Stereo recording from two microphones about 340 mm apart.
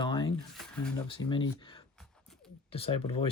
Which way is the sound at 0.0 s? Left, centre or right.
Centre.